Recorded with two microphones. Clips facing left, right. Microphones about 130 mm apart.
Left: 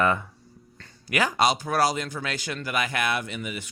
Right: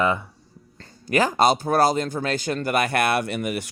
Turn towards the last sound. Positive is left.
turn(degrees=-65)  # may be behind; listen again after turning